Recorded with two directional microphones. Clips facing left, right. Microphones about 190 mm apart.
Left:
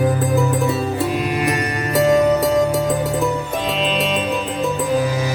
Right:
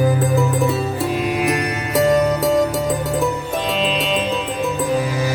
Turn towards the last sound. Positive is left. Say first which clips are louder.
# left 1 dB
turn(degrees=0)  # may be behind; listen again after turning